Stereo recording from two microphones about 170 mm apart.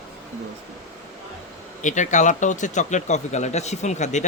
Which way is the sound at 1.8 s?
45° left (ahead or behind).